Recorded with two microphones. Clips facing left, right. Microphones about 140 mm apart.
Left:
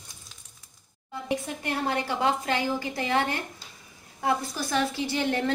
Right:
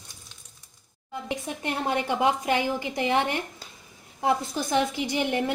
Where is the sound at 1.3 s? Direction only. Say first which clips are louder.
Left 1 dB; 20° right (ahead or behind).